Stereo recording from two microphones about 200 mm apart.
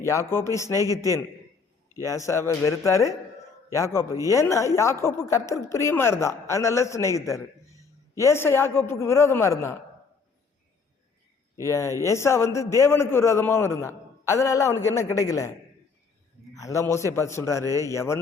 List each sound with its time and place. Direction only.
0.0 s a woman's voice: 15° left (ahead or behind)
0.8 s a man's voice: 15° right (ahead or behind)
2.0 s a woman's voice: 15° left (ahead or behind)
4.3 s a woman's voice: 15° left (ahead or behind)
11.6 s a woman's voice: 15° left (ahead or behind)
16.6 s a woman's voice: 15° left (ahead or behind)